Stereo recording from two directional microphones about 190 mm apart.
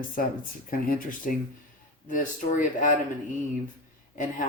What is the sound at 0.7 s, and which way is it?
Speech, 45° left (ahead or behind).